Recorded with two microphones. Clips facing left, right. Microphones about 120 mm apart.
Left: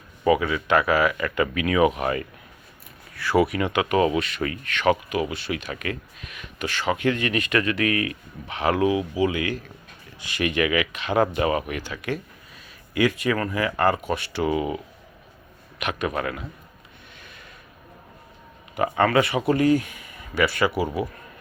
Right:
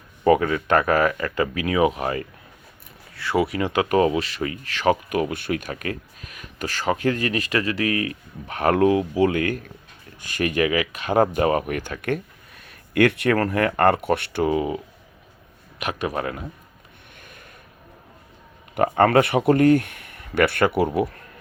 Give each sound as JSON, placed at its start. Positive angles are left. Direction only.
{"t": 0.3, "sound": "speech", "side_deg": -50}
{"t": 5.3, "sound": "speech", "side_deg": -50}
{"t": 8.4, "sound": "speech", "side_deg": -50}
{"t": 14.4, "sound": "speech", "side_deg": -30}
{"t": 15.8, "sound": "speech", "side_deg": -30}
{"t": 17.2, "sound": "a sound", "side_deg": -50}
{"t": 18.7, "sound": "speech", "side_deg": -55}